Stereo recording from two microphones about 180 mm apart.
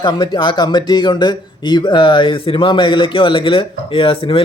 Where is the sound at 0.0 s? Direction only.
25° left (ahead or behind).